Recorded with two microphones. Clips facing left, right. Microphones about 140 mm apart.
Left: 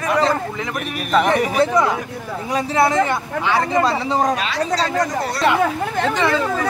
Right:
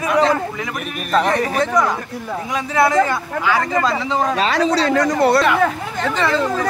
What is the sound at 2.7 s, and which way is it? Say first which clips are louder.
Speech: right 2 dB; 25° left (ahead or behind).